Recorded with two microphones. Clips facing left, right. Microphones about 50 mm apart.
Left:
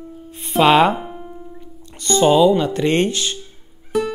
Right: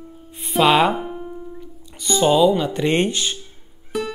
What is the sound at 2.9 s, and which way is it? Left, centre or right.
Speech, centre.